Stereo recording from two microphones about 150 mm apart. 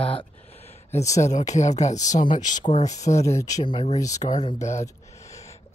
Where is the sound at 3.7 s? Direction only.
45° left (ahead or behind).